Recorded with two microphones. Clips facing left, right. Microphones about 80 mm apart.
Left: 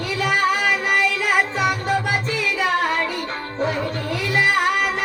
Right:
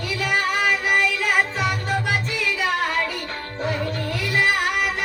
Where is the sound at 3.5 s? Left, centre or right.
Centre.